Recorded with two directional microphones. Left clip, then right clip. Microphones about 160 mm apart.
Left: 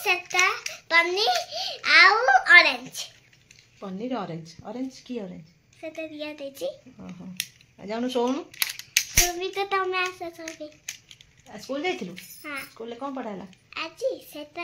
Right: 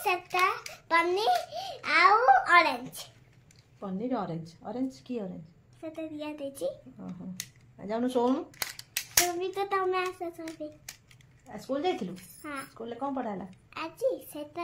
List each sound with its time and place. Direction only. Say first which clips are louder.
0.0 s hands: left 4 dB; 15° right (ahead or behind)
3.8 s a woman's voice: left 1 dB; 25° left (ahead or behind)
5.8 s a sound: left 4 dB; centre (ahead or behind)
7.0 s a woman's voice: left 7 dB; 25° left (ahead or behind)
8.9 s a sound: left 5 dB; 5° left (ahead or behind)
11.4 s a woman's voice: left 1 dB; 20° left (ahead or behind)
12.4 s speech: left 4 dB; 5° left (ahead or behind)
12.7 s a woman's voice: left 1 dB; 25° left (ahead or behind)
13.7 s a child's voice: left 2 dB; 10° right (ahead or behind)